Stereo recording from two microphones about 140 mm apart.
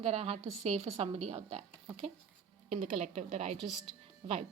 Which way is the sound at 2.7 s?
55° right (ahead or behind).